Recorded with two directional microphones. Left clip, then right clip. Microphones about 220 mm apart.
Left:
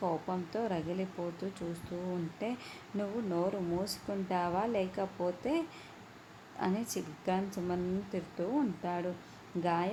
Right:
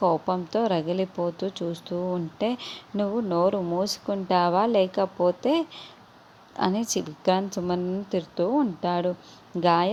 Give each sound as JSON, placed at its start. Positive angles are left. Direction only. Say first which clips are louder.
{"t": 0.0, "sound": "speech", "louder": "right 12 dB", "side_deg": -30}